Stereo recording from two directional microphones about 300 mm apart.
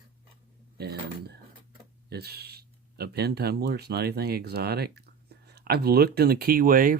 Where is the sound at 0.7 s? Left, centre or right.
Right.